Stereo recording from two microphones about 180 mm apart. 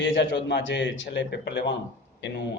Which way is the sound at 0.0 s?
90° left.